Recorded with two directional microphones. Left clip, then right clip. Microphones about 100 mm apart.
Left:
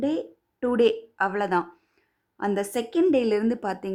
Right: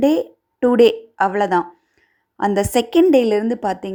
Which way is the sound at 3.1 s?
30° right (ahead or behind).